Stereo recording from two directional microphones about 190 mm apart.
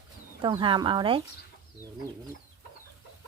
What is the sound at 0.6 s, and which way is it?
Speech, 25° right (ahead or behind).